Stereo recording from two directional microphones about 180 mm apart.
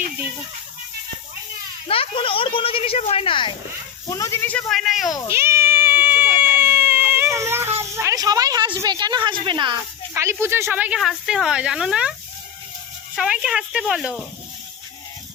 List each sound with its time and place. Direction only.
1.9 s a woman's voice: 30° left (ahead or behind)
4.1 s speech: 15° left (ahead or behind); by 5.1 s centre (ahead or behind)
5.3 s baby cry: 15° right (ahead or behind)
7.8 s a woman's voice: 15° right (ahead or behind)
10.2 s speech: 15° right (ahead or behind)
13.1 s speech: 5° right (ahead or behind)